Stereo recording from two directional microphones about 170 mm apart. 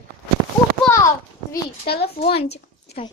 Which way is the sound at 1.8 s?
70° left (ahead or behind).